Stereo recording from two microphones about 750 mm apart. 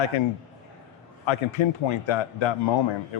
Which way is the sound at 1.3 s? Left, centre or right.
Left.